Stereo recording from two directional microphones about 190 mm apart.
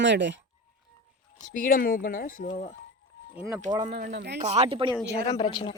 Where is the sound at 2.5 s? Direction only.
35° left (ahead or behind).